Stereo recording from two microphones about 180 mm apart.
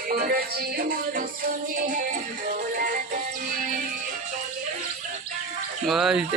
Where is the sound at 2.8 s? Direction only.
50° right (ahead or behind).